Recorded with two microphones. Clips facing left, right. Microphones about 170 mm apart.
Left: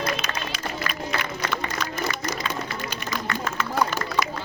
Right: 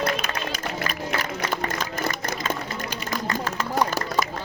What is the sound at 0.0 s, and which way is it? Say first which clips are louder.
Music: right 2 dB; 55° right (ahead or behind).